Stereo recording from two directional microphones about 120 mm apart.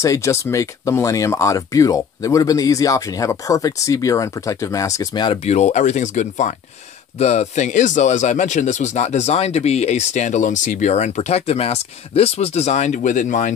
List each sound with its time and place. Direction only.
0.0 s speech: 25° left (ahead or behind)
5.4 s speech: 65° left (ahead or behind)
7.2 s speech: 65° left (ahead or behind); by 13.6 s 90° left